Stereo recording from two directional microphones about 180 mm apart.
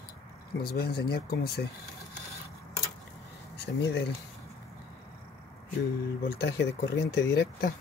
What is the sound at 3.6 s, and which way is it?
Speech, 75° left (ahead or behind).